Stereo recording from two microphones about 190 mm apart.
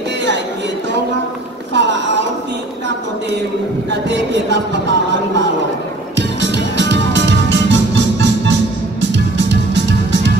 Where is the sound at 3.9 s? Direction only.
65° right (ahead or behind).